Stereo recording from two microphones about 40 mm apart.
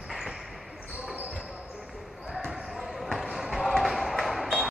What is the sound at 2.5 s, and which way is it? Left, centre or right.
Basketball bounce, centre.